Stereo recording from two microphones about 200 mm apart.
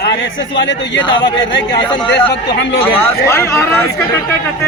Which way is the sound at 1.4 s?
65° left (ahead or behind).